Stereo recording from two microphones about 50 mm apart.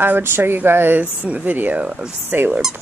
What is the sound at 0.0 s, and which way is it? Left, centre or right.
Speech, right.